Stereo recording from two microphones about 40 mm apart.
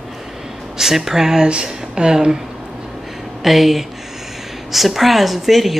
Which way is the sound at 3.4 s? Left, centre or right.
Centre.